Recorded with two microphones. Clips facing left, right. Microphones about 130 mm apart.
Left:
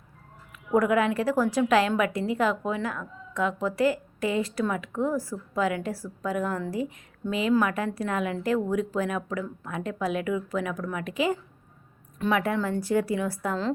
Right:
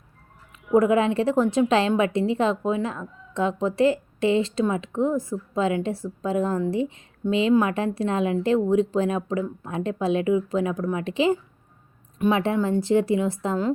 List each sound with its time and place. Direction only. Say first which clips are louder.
0.7 s a woman's voice: right 4 dB; 25° right (ahead or behind)